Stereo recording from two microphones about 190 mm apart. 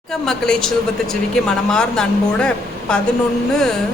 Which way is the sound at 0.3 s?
5° left (ahead or behind).